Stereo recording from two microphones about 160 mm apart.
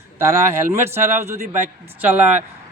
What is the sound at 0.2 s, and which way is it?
Speech, 15° right (ahead or behind).